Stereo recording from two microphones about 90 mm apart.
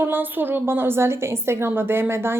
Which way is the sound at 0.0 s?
20° right (ahead or behind).